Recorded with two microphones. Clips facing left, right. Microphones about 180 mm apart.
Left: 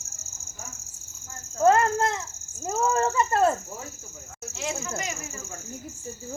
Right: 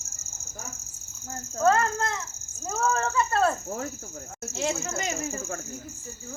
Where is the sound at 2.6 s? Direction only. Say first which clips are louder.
Left 3 dB; 15° left (ahead or behind).